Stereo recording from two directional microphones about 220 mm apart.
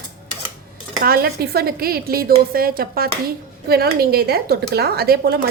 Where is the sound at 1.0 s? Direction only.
45° right (ahead or behind).